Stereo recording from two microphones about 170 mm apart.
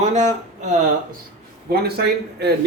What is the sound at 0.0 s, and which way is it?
Speech, 45° right (ahead or behind).